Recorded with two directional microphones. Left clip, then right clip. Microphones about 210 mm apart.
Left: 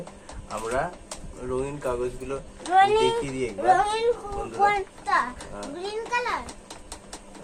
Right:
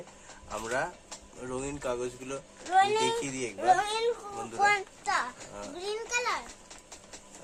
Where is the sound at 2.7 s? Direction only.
25° right (ahead or behind).